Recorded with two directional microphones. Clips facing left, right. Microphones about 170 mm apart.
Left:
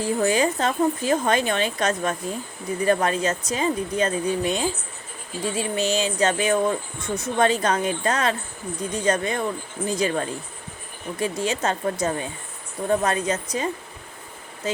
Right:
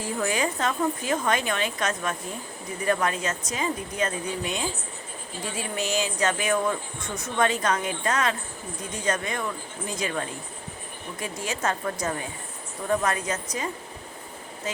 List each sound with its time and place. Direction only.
0.0 s a woman's voice: 30° left (ahead or behind)